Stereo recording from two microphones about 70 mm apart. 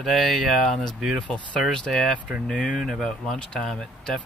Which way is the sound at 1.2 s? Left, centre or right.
Centre.